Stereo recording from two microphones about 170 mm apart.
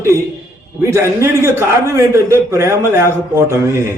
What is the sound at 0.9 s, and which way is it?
A man's voice, 15° right (ahead or behind).